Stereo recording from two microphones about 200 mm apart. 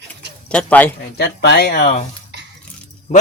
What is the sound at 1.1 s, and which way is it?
Speech, 55° left (ahead or behind).